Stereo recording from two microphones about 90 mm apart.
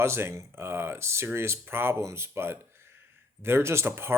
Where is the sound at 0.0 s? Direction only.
30° right (ahead or behind).